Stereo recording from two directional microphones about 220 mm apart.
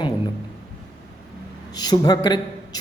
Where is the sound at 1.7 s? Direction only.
20° left (ahead or behind).